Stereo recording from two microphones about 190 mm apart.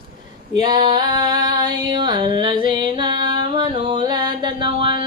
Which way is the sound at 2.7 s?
25° right (ahead or behind).